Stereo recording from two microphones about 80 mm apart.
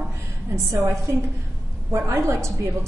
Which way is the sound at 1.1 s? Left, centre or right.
Right.